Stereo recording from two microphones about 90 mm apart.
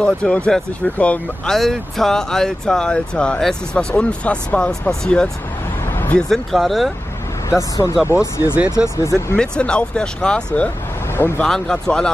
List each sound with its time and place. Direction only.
0.0 s speech: 10° left (ahead or behind)
1.5 s speech: 5° left (ahead or behind)
7.4 s speech: 35° left (ahead or behind)
9.4 s speech: 10° left (ahead or behind)
11.1 s speech: 25° left (ahead or behind)
11.4 s speech: 10° left (ahead or behind)